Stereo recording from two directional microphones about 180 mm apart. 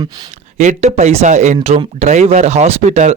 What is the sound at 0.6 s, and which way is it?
A man's voice, 40° right (ahead or behind).